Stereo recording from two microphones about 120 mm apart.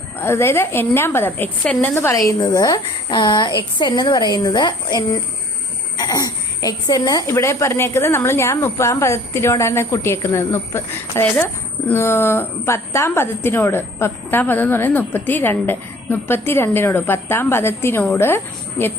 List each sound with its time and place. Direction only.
0.2 s a woman's voice: 20° left (ahead or behind)